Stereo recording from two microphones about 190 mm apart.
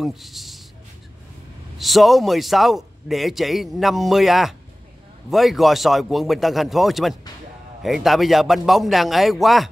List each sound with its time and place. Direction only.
0.0 s a man's voice: centre (ahead or behind)
1.8 s a man's voice: centre (ahead or behind)